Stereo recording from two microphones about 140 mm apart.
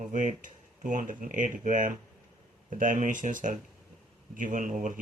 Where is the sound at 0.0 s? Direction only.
65° right (ahead or behind).